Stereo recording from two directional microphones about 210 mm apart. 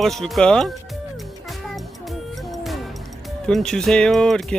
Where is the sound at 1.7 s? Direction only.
Centre (ahead or behind).